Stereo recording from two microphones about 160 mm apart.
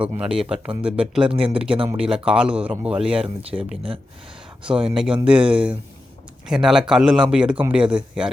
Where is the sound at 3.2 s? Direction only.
35° right (ahead or behind).